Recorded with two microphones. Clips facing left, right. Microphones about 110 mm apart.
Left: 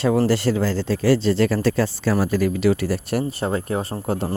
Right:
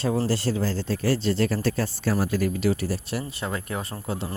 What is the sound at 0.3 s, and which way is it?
Speech, 75° left (ahead or behind).